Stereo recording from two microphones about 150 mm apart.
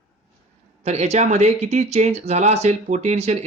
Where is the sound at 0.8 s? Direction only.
45° right (ahead or behind).